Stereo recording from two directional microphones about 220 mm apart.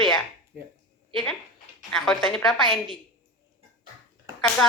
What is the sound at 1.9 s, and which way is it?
Speech, centre (ahead or behind).